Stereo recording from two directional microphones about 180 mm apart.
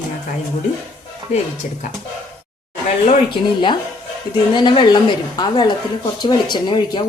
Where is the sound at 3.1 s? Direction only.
25° left (ahead or behind).